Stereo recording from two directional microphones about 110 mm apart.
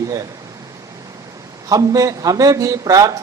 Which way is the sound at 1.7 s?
30° right (ahead or behind).